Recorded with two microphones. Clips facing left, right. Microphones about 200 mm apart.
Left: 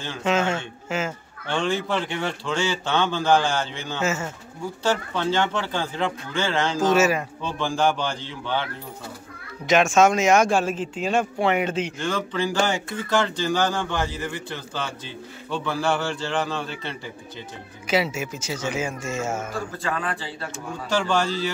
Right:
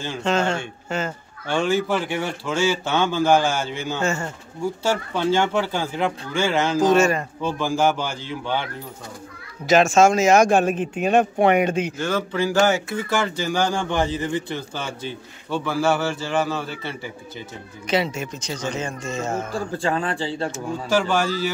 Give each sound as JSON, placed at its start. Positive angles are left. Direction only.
{"t": 0.2, "sound": "speech", "side_deg": 5}
{"t": 1.5, "sound": "speech", "side_deg": -5}
{"t": 4.0, "sound": "speech", "side_deg": 5}
{"t": 4.8, "sound": "speech", "side_deg": -10}
{"t": 6.9, "sound": "speech", "side_deg": 5}
{"t": 7.4, "sound": "speech", "side_deg": -10}
{"t": 9.7, "sound": "speech", "side_deg": -35}
{"t": 10.7, "sound": "speech", "side_deg": -20}
{"t": 17.8, "sound": "speech", "side_deg": 5}
{"t": 19.5, "sound": "speech", "side_deg": -30}
{"t": 20.9, "sound": "speech", "side_deg": -10}